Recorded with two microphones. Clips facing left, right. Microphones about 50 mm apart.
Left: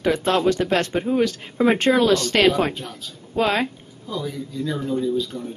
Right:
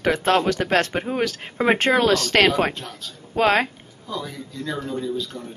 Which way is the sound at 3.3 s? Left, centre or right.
Right.